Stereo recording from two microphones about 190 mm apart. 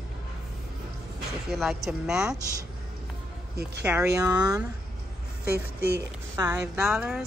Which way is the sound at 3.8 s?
10° right (ahead or behind).